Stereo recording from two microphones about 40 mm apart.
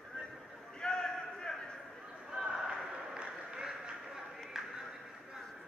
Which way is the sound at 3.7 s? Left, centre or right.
Centre.